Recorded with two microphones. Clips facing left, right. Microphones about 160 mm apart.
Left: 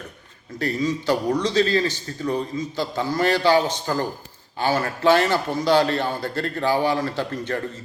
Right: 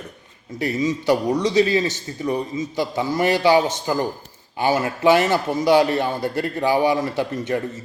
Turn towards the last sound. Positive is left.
turn(degrees=-15)  # may be behind; listen again after turning